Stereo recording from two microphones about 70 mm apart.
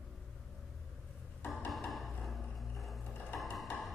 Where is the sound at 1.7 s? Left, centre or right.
Centre.